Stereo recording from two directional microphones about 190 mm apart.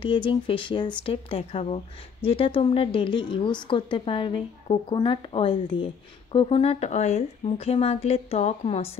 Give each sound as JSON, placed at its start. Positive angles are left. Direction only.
{"t": 0.0, "sound": "speech", "side_deg": 25}